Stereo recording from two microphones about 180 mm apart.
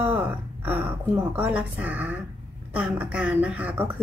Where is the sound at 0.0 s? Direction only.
10° right (ahead or behind).